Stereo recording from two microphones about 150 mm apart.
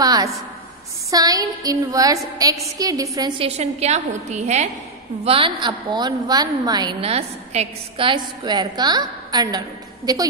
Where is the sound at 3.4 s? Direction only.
45° right (ahead or behind).